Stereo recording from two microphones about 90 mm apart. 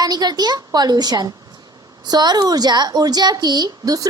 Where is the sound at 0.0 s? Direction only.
50° right (ahead or behind).